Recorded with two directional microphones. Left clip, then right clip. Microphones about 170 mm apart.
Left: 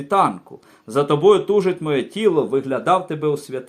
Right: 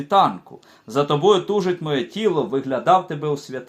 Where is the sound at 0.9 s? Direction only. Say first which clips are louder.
Left 2 dB; 25° left (ahead or behind).